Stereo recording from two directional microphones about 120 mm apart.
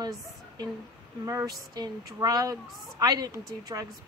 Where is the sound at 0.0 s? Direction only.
30° right (ahead or behind).